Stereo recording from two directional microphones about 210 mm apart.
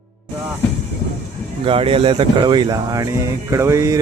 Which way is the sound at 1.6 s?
25° right (ahead or behind).